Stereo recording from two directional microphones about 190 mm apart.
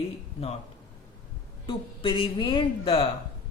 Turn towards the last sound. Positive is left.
turn(degrees=30)  # may be behind; listen again after turning